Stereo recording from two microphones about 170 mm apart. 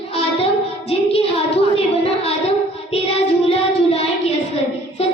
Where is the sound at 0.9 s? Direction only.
35° left (ahead or behind).